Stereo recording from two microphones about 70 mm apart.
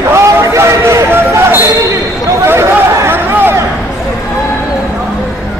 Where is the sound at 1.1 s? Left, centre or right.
Right.